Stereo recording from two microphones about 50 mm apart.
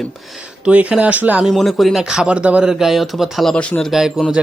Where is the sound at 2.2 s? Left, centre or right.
Right.